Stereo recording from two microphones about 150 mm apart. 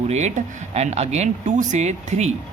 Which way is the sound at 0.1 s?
50° right (ahead or behind).